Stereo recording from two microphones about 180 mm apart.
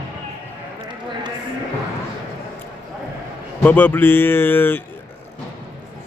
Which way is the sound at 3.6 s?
10° left (ahead or behind).